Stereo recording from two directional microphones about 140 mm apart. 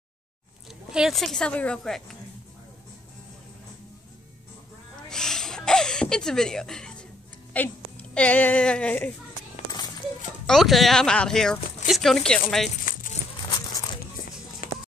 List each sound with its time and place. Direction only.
0.9 s a woman's voice: centre (ahead or behind)
5.1 s a sound: 5° left (ahead or behind)
7.5 s speech: 10° left (ahead or behind)
10.4 s a woman's voice: centre (ahead or behind)
12.9 s a sound: 80° left
14.6 s music: 75° left (ahead or behind)